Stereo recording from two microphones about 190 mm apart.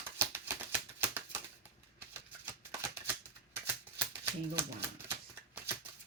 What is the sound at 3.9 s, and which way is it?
Typewriter, 10° right (ahead or behind).